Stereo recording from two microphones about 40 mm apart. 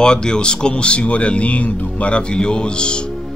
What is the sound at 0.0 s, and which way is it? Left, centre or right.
Speech, left.